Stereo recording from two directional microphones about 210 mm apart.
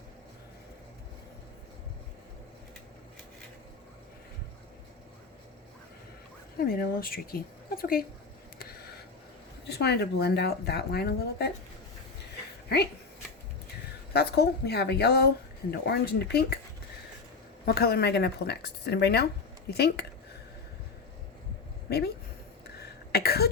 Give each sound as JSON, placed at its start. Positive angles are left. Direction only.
{"t": 6.6, "sound": "a woman's voice", "side_deg": 45}
{"t": 9.6, "sound": "speech", "side_deg": 50}
{"t": 12.6, "sound": "speech", "side_deg": 50}
{"t": 14.1, "sound": "speech", "side_deg": 50}
{"t": 17.7, "sound": "speech", "side_deg": 45}
{"t": 21.8, "sound": "speech", "side_deg": 50}
{"t": 22.8, "sound": "cough", "side_deg": 50}